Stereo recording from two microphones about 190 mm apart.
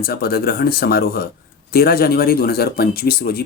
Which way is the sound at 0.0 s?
55° left (ahead or behind).